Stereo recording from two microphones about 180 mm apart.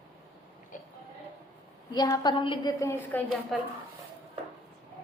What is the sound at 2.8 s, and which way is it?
Speech, 10° left (ahead or behind).